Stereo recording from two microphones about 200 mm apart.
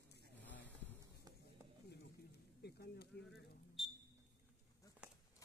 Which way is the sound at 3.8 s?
Centre (ahead or behind).